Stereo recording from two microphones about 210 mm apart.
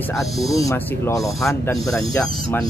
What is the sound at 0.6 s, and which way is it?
Speech, 15° left (ahead or behind).